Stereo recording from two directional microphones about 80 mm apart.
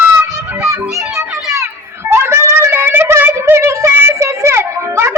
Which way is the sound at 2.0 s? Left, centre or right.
Right.